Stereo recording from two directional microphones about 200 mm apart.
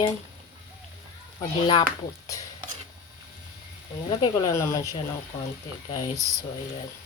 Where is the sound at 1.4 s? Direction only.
25° left (ahead or behind).